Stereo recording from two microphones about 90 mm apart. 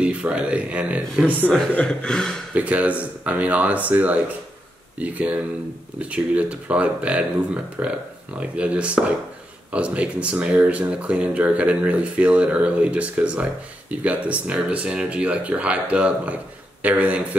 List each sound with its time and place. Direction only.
0.0 s speech: 15° right (ahead or behind)
1.8 s speech: 10° left (ahead or behind)
2.5 s speech: 15° right (ahead or behind)